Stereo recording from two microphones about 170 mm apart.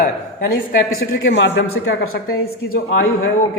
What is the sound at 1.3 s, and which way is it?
Speech, 85° left.